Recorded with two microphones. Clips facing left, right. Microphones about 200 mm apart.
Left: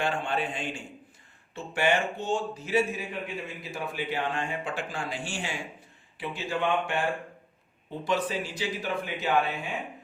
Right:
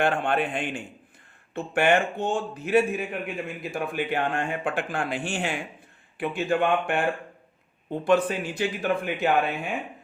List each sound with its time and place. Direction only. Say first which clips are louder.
0.0 s a man's voice: right 5 dB; 60° right (ahead or behind)